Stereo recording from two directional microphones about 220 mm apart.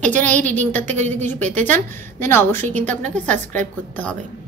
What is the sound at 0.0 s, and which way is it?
A woman's voice, 5° left (ahead or behind).